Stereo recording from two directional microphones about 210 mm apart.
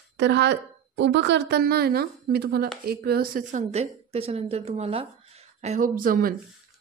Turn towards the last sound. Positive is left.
turn(degrees=-40)  # may be behind; listen again after turning